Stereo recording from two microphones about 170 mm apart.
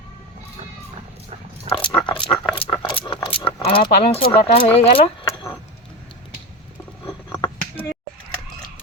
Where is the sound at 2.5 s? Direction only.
30° left (ahead or behind).